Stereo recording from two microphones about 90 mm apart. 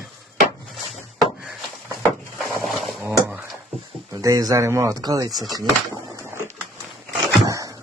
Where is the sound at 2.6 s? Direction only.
Centre (ahead or behind).